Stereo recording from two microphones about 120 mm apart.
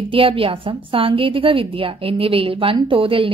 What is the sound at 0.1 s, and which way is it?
A woman's voice, 50° right (ahead or behind).